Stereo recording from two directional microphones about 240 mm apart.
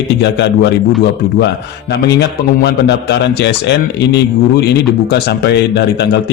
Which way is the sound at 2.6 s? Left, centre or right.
Left.